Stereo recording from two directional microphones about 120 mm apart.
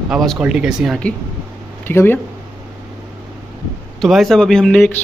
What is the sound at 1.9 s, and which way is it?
Speech, 20° left (ahead or behind).